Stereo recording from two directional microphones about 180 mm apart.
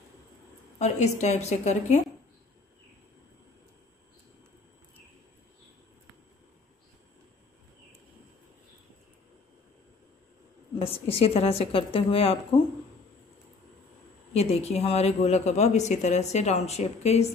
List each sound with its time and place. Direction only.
0.7 s speech: 40° left (ahead or behind)
10.8 s speech: 30° left (ahead or behind)
14.3 s speech: 35° left (ahead or behind)